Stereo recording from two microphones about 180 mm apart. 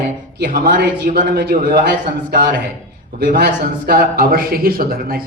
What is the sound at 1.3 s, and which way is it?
Speech, 65° right (ahead or behind).